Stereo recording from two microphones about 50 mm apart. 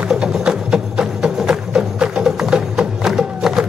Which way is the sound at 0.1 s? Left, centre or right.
Centre.